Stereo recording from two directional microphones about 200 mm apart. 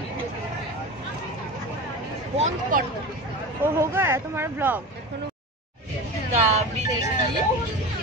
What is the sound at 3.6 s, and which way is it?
Speech, 10° right (ahead or behind).